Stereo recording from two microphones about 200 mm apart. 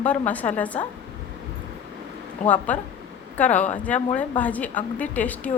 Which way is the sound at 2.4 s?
40° left (ahead or behind).